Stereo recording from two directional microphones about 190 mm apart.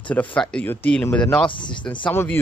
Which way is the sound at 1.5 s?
25° left (ahead or behind).